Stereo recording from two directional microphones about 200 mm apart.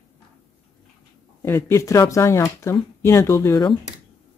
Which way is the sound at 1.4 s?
15° left (ahead or behind).